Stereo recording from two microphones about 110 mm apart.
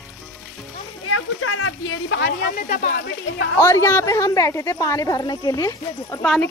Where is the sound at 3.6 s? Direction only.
25° left (ahead or behind).